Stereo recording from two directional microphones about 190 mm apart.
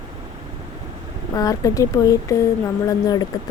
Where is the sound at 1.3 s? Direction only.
20° left (ahead or behind).